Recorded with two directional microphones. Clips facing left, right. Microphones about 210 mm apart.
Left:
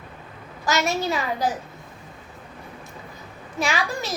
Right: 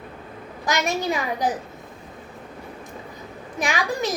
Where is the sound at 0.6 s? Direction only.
15° right (ahead or behind).